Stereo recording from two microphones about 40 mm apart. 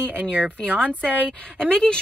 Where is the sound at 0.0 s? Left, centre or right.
Right.